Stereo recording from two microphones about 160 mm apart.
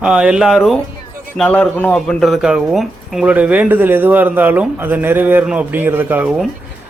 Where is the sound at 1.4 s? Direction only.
10° left (ahead or behind).